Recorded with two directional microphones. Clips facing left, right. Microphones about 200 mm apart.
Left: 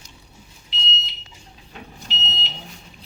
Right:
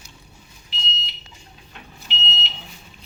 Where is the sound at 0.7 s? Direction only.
20° left (ahead or behind).